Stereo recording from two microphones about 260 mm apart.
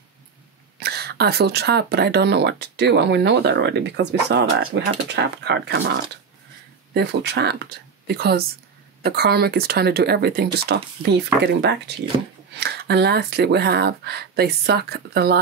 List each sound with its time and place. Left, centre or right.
0.7 s speech: right